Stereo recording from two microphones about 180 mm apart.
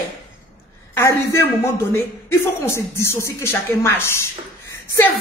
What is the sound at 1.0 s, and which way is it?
Speech, 15° left (ahead or behind).